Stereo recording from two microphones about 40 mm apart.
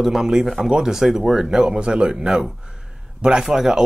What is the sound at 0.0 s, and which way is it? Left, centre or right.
Speech, centre.